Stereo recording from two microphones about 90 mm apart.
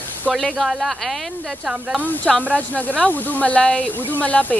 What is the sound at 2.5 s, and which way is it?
Speech, 15° left (ahead or behind).